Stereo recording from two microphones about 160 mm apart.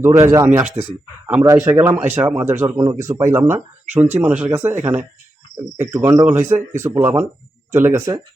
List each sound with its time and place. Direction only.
0.0 s speech: 20° right (ahead or behind)